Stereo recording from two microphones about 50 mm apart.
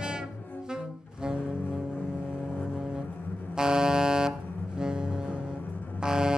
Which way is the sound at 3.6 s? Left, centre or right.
Centre.